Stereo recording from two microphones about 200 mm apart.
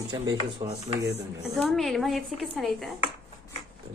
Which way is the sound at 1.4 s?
Centre (ahead or behind).